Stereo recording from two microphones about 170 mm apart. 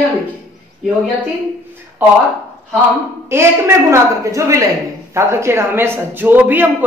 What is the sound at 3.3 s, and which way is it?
Speech, 15° right (ahead or behind).